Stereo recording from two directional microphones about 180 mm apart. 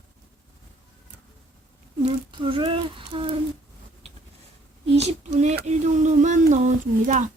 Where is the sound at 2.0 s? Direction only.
30° right (ahead or behind).